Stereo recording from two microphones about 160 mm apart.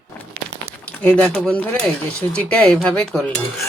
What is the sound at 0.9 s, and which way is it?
Speech, 10° left (ahead or behind).